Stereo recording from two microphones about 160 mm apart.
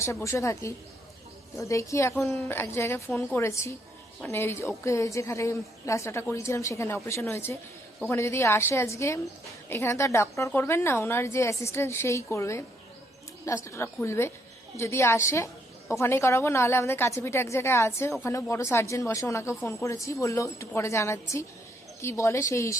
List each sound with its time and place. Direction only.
0.0 s a woman's voice: 20° left (ahead or behind)